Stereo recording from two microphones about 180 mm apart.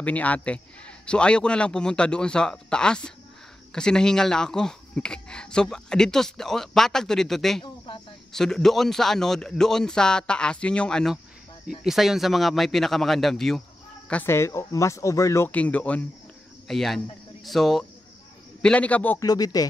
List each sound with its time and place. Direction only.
0.0 s speech: 10° left (ahead or behind)
7.6 s snake: 25° left (ahead or behind)
8.3 s speech: 5° left (ahead or behind)
19.2 s speech: 20° left (ahead or behind)